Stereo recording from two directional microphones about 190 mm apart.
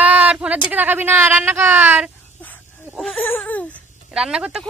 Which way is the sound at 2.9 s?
Centre (ahead or behind).